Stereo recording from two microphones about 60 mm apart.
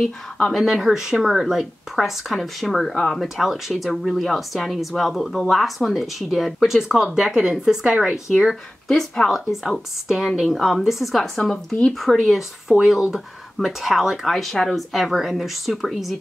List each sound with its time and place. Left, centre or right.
0.5 s a woman's voice: centre
8.8 s speech: centre
9.6 s speech: centre